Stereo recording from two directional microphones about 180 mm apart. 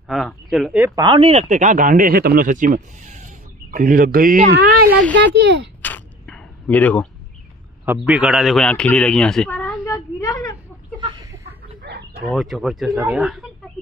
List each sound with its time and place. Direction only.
0.1 s speech: centre (ahead or behind)
0.8 s speech: 20° right (ahead or behind)
1.5 s speech: 45° right (ahead or behind)
5.1 s speech: 75° right (ahead or behind)
5.8 s a sound: 10° left (ahead or behind)
7.8 s a man's voice: 10° right (ahead or behind); by 10.5 s 20° left (ahead or behind)
11.0 s a sound: 25° right (ahead or behind)
11.4 s a sound: 70° right (ahead or behind)
12.4 s speech: centre (ahead or behind)